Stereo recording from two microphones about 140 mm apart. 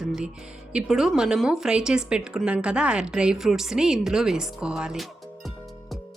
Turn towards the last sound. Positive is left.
turn(degrees=-5)  # may be behind; listen again after turning